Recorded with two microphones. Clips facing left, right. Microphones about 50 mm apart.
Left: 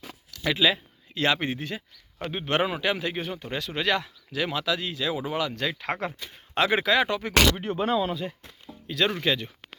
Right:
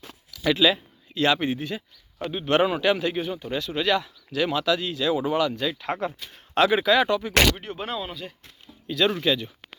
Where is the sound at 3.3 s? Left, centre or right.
Left.